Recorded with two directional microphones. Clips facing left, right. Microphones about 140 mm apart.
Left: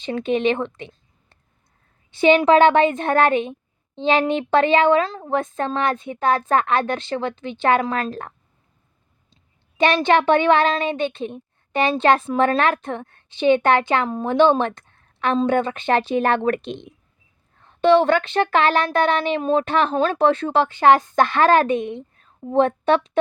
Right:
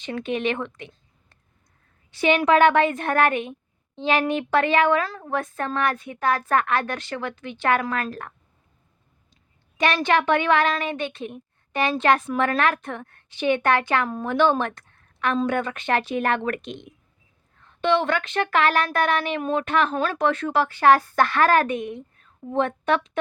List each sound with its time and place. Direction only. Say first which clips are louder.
0.0 s a woman's voice: left 5 dB; 25° left (ahead or behind)
9.3 s speech: left 1 dB; 25° left (ahead or behind)